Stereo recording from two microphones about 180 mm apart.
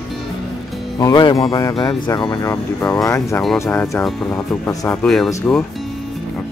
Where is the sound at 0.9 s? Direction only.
25° left (ahead or behind); by 4.6 s 5° left (ahead or behind).